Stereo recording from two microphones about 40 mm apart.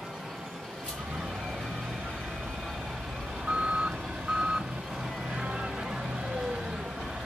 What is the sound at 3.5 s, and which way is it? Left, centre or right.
Reversing beeps, right.